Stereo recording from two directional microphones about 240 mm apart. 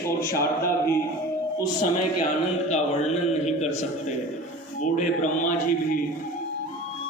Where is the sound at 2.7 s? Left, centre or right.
Left.